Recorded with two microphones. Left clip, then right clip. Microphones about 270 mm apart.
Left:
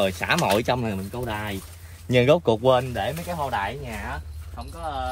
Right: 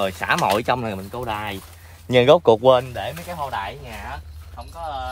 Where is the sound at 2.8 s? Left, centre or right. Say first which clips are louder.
Left 1 dB; centre.